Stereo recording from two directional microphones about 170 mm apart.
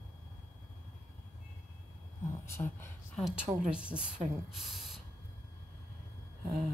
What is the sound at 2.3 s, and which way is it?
Speech, 15° left (ahead or behind).